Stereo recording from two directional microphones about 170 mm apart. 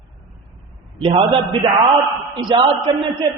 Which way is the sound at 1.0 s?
30° right (ahead or behind).